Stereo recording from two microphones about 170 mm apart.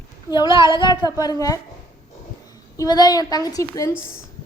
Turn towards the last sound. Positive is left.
turn(degrees=20)  # may be behind; listen again after turning